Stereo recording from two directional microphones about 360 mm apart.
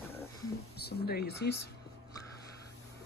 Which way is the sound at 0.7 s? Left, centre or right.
Left.